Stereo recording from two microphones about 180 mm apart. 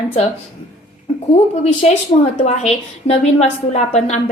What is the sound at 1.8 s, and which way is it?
Speech, 35° left (ahead or behind).